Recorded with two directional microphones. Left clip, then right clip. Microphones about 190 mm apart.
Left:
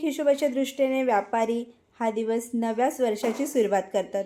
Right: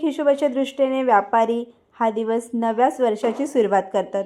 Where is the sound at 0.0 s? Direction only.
10° right (ahead or behind).